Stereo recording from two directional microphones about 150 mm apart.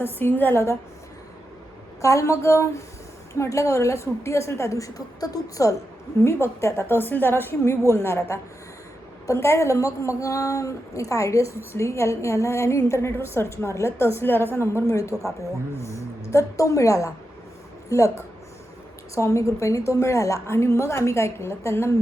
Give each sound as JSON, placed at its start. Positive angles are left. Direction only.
{"t": 0.0, "sound": "a woman's voice", "side_deg": 15}
{"t": 2.0, "sound": "a woman's voice", "side_deg": 20}